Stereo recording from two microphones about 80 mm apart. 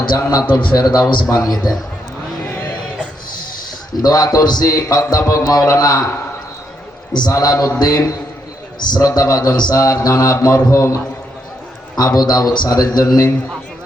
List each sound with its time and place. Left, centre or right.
0.3 s a man's voice: left
1.3 s a man's voice: left
4.0 s a man's voice: left
7.1 s a man's voice: left
7.3 s a man's voice: left
9.7 s a man's voice: left
11.9 s a man's voice: left